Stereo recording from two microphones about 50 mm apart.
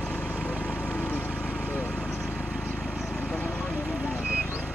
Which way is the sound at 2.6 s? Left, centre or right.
Centre.